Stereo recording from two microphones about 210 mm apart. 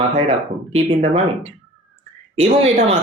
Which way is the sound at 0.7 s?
25° right (ahead or behind).